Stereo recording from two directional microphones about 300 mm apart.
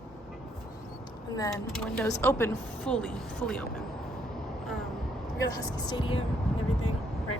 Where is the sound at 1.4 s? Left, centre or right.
Centre.